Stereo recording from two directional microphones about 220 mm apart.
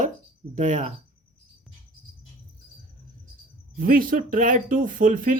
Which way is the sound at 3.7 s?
40° right (ahead or behind).